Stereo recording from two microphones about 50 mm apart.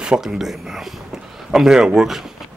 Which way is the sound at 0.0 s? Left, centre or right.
Centre.